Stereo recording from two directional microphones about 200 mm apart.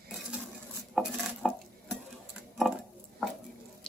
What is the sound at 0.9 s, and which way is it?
Dishes, centre (ahead or behind).